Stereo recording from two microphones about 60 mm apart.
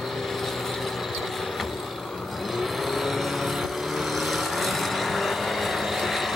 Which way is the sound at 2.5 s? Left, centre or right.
Centre.